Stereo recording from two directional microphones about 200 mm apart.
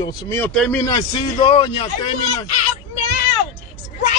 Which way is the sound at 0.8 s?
20° left (ahead or behind).